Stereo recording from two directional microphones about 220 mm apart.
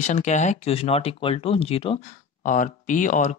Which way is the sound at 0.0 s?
30° left (ahead or behind).